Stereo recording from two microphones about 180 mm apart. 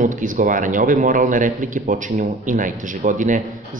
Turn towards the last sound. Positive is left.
turn(degrees=-45)  # may be behind; listen again after turning